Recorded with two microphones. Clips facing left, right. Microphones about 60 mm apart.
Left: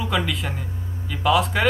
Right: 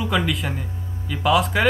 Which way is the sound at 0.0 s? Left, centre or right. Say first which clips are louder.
Right 2 dB; centre.